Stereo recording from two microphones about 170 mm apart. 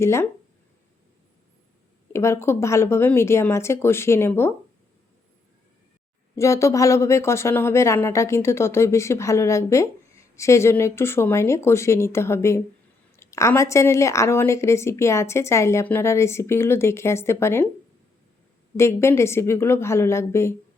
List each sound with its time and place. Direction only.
0.0 s a woman's voice: 15° left (ahead or behind)
2.1 s a woman's voice: 15° left (ahead or behind)
6.3 s a woman's voice: 15° left (ahead or behind)
18.8 s a woman's voice: 15° left (ahead or behind)